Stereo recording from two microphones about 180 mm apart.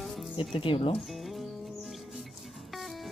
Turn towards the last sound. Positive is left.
turn(degrees=0)  # may be behind; listen again after turning